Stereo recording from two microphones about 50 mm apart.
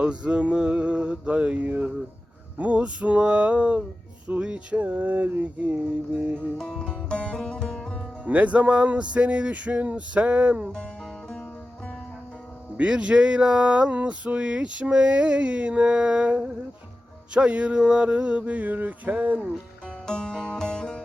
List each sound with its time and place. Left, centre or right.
0.0 s music: right
6.6 s music: centre
8.2 s music: right
12.7 s music: right
20.1 s music: centre